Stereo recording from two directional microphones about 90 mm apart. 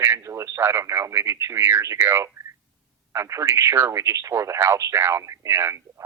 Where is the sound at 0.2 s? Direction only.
35° right (ahead or behind).